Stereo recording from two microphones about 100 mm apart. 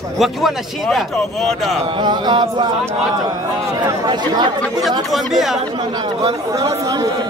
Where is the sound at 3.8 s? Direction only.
45° right (ahead or behind).